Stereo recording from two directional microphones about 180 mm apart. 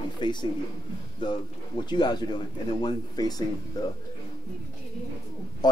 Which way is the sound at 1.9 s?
25° left (ahead or behind).